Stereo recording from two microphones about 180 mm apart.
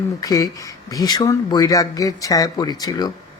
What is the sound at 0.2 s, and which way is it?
Speech, 20° left (ahead or behind).